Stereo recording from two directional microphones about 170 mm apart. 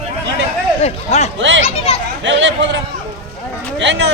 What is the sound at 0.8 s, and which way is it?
Speech, 40° left (ahead or behind).